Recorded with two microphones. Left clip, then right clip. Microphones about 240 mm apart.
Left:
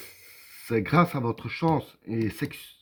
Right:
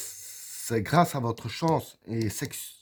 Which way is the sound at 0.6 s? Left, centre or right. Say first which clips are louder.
Even; right.